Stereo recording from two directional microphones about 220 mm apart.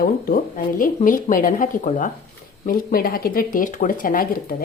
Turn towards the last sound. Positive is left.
turn(degrees=40)  # may be behind; listen again after turning